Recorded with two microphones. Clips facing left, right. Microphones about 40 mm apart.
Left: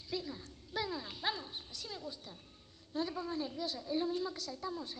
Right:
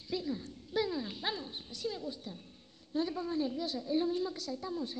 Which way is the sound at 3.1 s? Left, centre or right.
Centre.